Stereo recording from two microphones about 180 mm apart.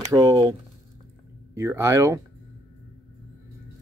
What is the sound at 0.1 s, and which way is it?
Speech, 20° right (ahead or behind).